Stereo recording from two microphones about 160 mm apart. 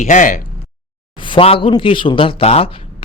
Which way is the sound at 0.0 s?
55° left (ahead or behind).